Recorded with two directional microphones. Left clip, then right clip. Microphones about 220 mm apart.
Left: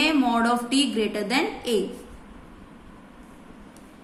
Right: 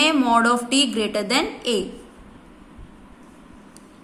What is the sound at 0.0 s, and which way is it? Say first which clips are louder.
A woman's voice: right 4 dB; 20° right (ahead or behind).